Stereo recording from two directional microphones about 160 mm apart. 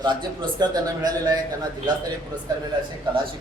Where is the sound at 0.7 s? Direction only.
25° right (ahead or behind).